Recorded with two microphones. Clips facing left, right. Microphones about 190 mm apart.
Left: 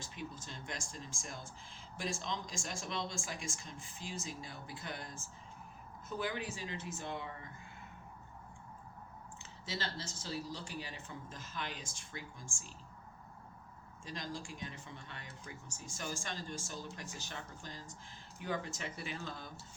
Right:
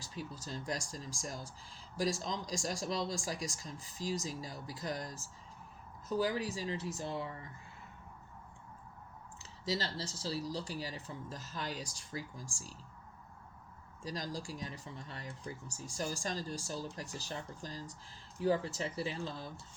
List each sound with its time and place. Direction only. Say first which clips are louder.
0.0 s speech: right 1 dB; 35° right (ahead or behind)
9.4 s speech: right 5 dB; 35° right (ahead or behind)
14.0 s speech: right 3 dB; 40° right (ahead or behind)